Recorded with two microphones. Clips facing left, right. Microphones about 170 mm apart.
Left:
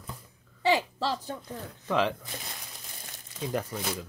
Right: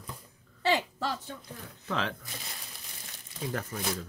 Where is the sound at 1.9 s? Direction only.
15° left (ahead or behind).